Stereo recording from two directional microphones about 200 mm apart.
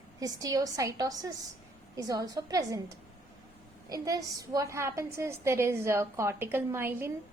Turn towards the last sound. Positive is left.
turn(degrees=-10)  # may be behind; listen again after turning